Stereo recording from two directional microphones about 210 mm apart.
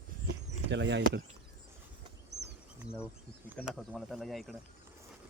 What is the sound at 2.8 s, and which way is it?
Insect, 5° right (ahead or behind).